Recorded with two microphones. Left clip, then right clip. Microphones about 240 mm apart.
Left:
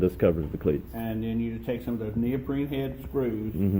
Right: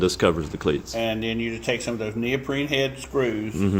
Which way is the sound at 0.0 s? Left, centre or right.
Centre.